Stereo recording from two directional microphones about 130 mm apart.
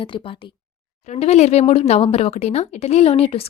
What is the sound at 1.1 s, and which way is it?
Speech, 55° left (ahead or behind).